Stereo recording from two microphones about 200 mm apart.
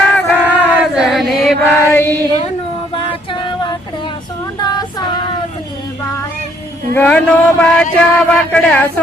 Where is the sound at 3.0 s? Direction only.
25° left (ahead or behind).